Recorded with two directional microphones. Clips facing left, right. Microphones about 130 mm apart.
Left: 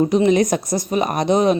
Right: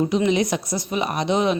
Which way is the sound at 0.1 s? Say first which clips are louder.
Left 5 dB; 45° left (ahead or behind).